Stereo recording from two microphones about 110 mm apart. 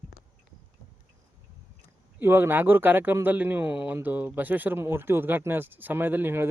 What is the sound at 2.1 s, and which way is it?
Speech, 20° right (ahead or behind).